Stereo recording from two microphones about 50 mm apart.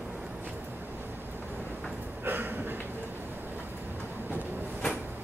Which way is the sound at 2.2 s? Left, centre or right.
Right.